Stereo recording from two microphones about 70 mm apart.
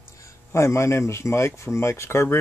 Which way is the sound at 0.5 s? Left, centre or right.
Left.